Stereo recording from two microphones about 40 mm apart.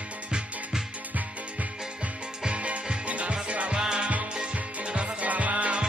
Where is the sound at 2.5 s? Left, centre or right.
Right.